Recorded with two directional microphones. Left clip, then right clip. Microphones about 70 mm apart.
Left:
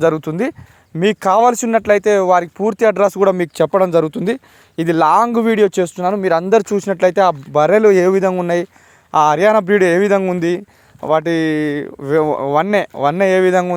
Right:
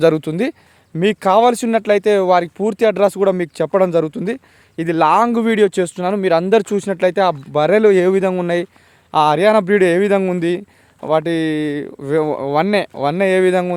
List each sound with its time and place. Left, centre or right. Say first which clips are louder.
0.0 s speech: right 1 dB; right
0.9 s speech: left 1 dB; centre
1.5 s speech: left 2 dB; centre
2.9 s speech: left 1 dB; centre
3.5 s speech: left 2 dB; left
5.3 s speech: left 1 dB; centre
7.0 s speech: left 3 dB; centre
9.1 s speech: left 1 dB; centre
11.0 s speech: left 2 dB; centre
11.8 s speech: left 2 dB; centre